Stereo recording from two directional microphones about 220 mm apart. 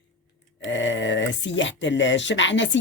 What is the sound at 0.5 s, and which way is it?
A man's voice, 55° left (ahead or behind).